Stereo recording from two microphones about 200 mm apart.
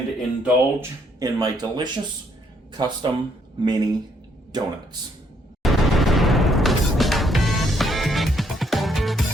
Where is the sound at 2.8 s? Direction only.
20° right (ahead or behind).